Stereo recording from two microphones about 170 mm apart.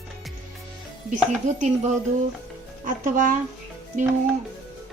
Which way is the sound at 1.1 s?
45° right (ahead or behind).